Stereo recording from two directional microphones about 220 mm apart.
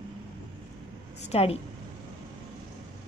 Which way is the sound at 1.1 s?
30° left (ahead or behind).